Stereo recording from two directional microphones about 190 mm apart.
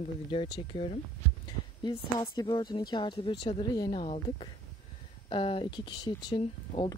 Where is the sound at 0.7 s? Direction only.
30° left (ahead or behind).